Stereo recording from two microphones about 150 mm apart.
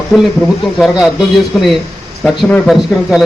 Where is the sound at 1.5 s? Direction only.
5° left (ahead or behind).